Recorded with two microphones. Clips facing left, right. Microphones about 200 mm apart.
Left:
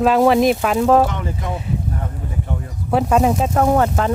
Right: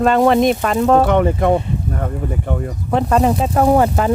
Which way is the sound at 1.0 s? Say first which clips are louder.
Right 9 dB; 60° right (ahead or behind).